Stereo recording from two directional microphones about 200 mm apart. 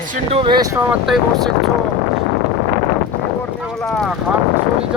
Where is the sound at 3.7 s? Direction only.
Centre (ahead or behind).